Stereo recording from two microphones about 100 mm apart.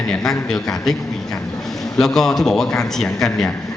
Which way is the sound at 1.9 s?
5° left (ahead or behind).